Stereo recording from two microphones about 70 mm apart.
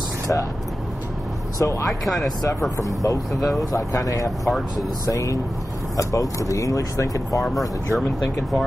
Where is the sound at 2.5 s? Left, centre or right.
Left.